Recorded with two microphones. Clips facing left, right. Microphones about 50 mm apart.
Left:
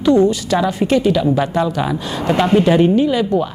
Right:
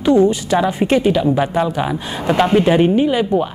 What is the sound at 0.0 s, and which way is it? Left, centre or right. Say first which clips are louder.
A woman's voice: even; right.